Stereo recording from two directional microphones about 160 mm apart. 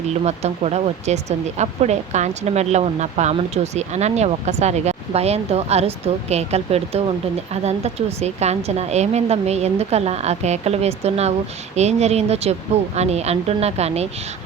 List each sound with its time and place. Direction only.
0.3 s speech: 45° right (ahead or behind)